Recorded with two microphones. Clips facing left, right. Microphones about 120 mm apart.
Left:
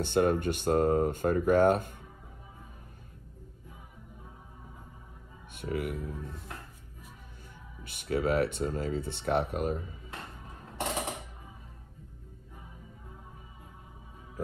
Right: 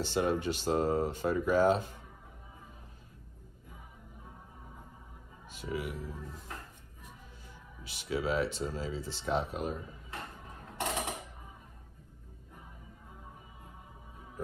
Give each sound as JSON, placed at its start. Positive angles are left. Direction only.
{"t": 0.0, "sound": "speech", "side_deg": 55}
{"t": 5.5, "sound": "speech", "side_deg": 55}
{"t": 7.8, "sound": "speech", "side_deg": 55}